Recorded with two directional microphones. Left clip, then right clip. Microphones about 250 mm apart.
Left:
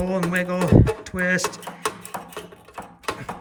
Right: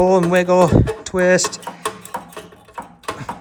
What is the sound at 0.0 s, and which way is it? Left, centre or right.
Speech, centre.